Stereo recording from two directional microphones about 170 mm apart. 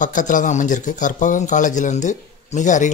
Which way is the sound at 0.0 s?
50° left (ahead or behind).